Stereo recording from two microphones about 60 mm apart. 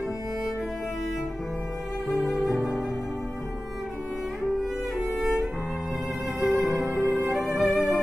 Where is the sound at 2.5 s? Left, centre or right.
Left.